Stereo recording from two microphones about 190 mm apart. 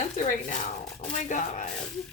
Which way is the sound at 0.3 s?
40° left (ahead or behind).